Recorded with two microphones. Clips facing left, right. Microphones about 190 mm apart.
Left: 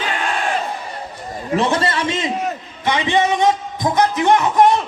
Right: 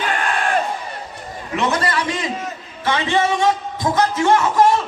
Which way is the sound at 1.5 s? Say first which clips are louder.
Left 2 dB; 30° left (ahead or behind).